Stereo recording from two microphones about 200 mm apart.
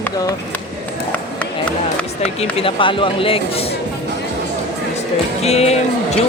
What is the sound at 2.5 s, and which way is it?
Speech, 25° left (ahead or behind).